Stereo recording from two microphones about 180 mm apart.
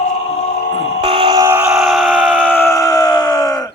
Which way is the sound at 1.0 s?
30° right (ahead or behind).